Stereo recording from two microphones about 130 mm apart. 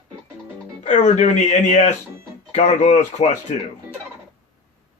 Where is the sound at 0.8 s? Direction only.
70° left (ahead or behind).